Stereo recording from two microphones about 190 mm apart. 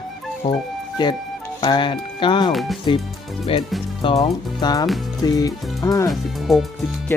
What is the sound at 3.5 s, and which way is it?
Speech, 30° left (ahead or behind).